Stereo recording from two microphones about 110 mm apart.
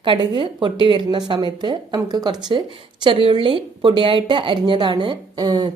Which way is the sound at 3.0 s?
55° right (ahead or behind).